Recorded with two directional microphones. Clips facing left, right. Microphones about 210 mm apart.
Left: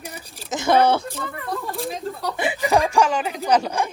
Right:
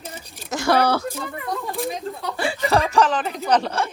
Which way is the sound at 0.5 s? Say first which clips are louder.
Left 2 dB; 20° left (ahead or behind).